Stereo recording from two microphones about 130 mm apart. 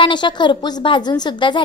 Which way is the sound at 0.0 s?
35° left (ahead or behind).